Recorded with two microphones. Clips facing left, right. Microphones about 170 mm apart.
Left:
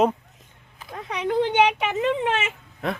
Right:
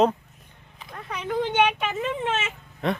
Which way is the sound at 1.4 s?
15° left (ahead or behind).